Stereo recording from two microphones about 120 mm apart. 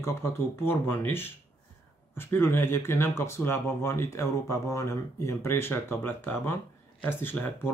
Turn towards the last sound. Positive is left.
turn(degrees=15)  # may be behind; listen again after turning